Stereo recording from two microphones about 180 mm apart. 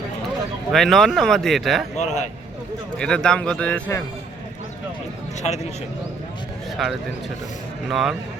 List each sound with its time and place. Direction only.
0.7 s speech: centre (ahead or behind)
2.0 s a man's voice: 40° left (ahead or behind)
3.0 s speech: 5° left (ahead or behind)
6.8 s speech: centre (ahead or behind)